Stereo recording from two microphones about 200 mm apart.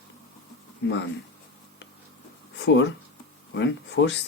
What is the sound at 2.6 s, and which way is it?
Speech, 60° left (ahead or behind).